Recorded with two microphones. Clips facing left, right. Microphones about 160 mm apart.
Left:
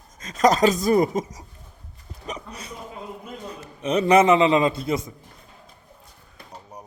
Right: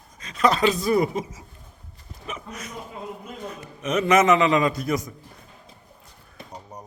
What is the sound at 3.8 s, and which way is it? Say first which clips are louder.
A man's voice: left 2 dB; 30° left (ahead or behind).